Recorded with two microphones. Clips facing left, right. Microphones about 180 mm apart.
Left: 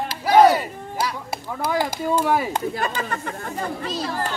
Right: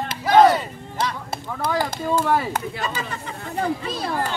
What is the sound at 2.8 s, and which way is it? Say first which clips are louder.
Speech: left 3 dB; 55° left (ahead or behind).